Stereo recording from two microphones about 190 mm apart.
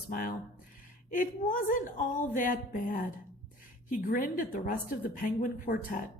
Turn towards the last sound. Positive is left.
turn(degrees=45)  # may be behind; listen again after turning